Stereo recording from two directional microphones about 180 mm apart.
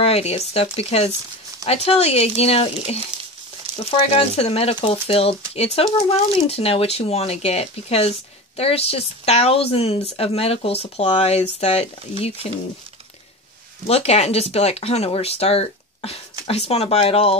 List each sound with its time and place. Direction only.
0.0 s speech: 35° left (ahead or behind)
13.8 s speech: 35° left (ahead or behind)